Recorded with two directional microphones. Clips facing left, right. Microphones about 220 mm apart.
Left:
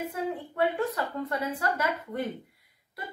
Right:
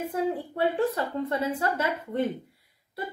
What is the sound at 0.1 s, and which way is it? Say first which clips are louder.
A woman's voice: right 5 dB; 30° right (ahead or behind).